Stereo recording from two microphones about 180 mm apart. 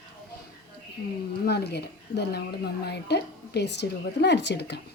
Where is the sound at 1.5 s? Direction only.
65° left (ahead or behind).